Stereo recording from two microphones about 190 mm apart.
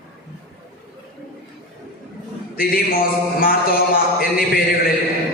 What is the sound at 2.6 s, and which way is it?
A man's voice, 50° left (ahead or behind).